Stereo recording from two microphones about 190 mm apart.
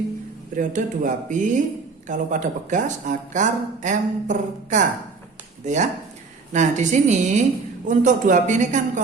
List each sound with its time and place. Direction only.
0.5 s speech: 45° right (ahead or behind)